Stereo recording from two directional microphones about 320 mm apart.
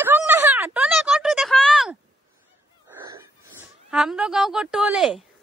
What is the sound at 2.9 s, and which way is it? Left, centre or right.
Wheeze, centre.